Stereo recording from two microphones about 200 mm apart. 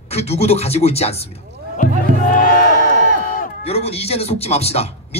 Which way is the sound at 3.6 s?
30° left (ahead or behind).